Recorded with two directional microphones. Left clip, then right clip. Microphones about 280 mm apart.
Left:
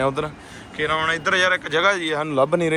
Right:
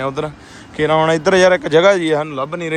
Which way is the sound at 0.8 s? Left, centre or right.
Right.